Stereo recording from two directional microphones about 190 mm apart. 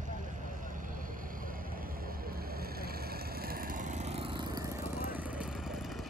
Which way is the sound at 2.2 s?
55° right (ahead or behind).